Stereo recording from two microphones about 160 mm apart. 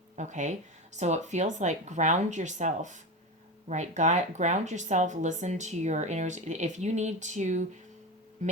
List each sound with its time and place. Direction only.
0.2 s speech: 50° right (ahead or behind)